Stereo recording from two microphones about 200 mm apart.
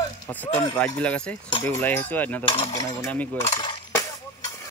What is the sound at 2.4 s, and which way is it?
Mechanisms, 25° left (ahead or behind).